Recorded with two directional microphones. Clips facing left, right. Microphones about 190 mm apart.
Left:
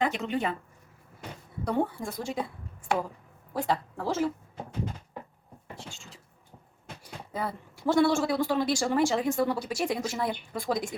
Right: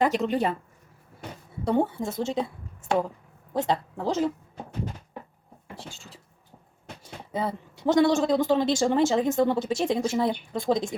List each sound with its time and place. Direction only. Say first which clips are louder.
0.0 s a woman's voice: right 5 dB; 40° right (ahead or behind)
1.6 s a man's voice: right 4 dB; 25° right (ahead or behind)
7.0 s a man's voice: right 4 dB; 20° right (ahead or behind)